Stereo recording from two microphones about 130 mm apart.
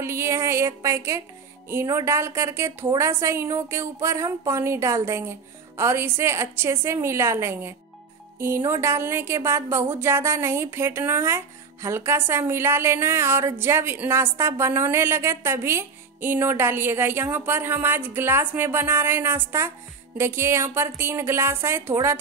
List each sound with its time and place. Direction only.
0.0 s speech: 20° right (ahead or behind)